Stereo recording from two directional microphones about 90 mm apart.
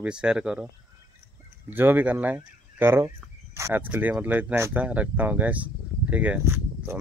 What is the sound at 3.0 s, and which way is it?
Fowl, 35° right (ahead or behind).